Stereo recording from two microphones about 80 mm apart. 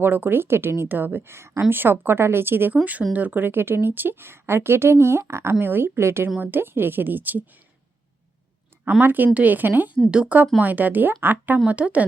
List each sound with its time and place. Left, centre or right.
0.0 s speech: right
9.0 s speech: right